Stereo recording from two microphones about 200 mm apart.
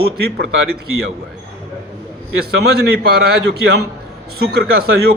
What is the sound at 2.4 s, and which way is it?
A man's voice, 55° right (ahead or behind).